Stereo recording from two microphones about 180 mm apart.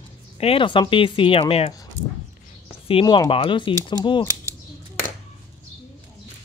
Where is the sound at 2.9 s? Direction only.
30° left (ahead or behind).